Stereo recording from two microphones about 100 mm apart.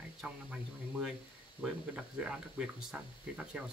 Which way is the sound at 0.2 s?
15° right (ahead or behind).